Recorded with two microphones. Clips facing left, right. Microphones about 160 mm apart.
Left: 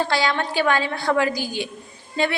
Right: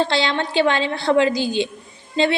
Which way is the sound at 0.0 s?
25° right (ahead or behind).